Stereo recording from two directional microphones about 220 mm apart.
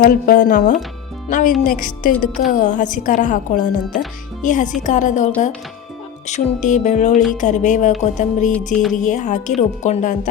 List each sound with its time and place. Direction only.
0.0 s speech: 40° left (ahead or behind)
8.5 s music: centre (ahead or behind)
9.0 s speech: 35° left (ahead or behind)